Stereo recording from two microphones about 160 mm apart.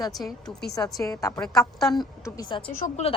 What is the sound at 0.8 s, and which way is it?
A woman's voice, 20° left (ahead or behind).